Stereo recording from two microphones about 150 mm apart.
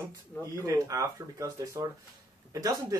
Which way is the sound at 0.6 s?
20° right (ahead or behind).